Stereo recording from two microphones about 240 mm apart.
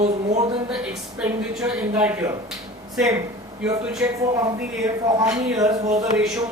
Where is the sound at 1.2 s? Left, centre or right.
Centre.